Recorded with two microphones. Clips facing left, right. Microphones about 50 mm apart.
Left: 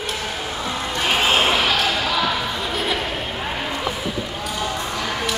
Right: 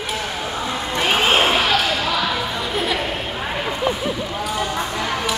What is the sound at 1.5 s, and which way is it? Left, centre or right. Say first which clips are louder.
Basketball bounce: right 1 dB; centre.